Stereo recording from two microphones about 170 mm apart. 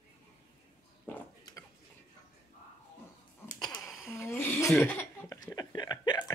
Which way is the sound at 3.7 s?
Centre (ahead or behind).